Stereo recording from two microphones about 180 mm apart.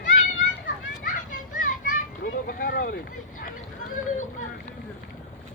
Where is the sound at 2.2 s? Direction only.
55° left (ahead or behind).